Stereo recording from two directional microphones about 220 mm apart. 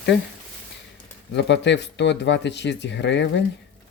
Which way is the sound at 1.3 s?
50° left (ahead or behind).